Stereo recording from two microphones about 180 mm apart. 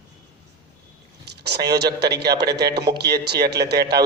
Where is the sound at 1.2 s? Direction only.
70° right (ahead or behind).